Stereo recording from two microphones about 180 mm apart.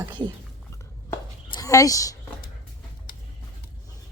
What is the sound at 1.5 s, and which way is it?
Speech, 20° left (ahead or behind).